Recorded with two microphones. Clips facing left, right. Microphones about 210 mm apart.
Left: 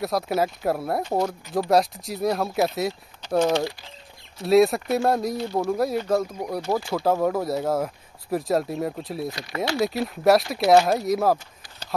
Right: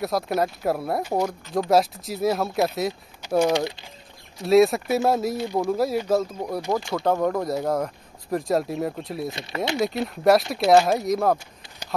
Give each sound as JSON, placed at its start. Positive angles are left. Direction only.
{"t": 0.0, "sound": "speech", "side_deg": 0}
{"t": 4.4, "sound": "speech", "side_deg": 0}
{"t": 5.7, "sound": "speech", "side_deg": 0}
{"t": 9.3, "sound": "speech", "side_deg": -25}
{"t": 9.8, "sound": "speech", "side_deg": 0}